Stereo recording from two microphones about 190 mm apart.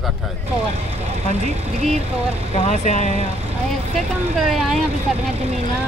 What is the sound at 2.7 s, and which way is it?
Speech, 40° left (ahead or behind).